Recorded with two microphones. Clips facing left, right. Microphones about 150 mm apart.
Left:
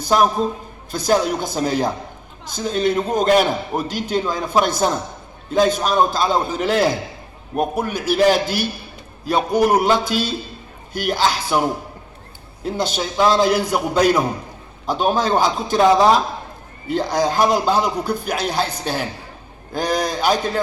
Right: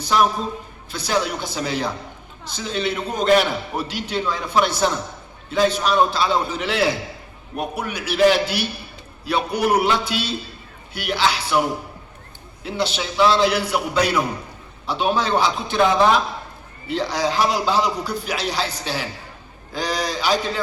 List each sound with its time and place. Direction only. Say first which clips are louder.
0.0 s a man's voice: left 3 dB; 45° left (ahead or behind)
12.6 s a man's voice: left 2 dB; 45° left (ahead or behind)
16.9 s a man's voice: left 3 dB; 50° left (ahead or behind)